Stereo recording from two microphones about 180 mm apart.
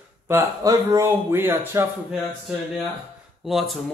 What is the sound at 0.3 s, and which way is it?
A man's voice, 15° right (ahead or behind).